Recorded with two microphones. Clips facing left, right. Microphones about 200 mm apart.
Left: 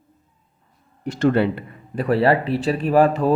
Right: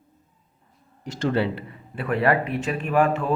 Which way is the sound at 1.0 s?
60° left (ahead or behind).